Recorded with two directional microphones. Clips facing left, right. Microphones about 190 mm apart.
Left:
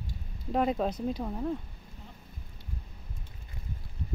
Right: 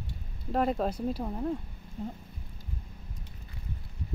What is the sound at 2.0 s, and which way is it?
Speech, 45° right (ahead or behind).